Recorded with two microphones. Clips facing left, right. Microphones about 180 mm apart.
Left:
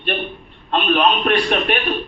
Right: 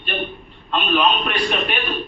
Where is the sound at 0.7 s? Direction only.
55° left (ahead or behind).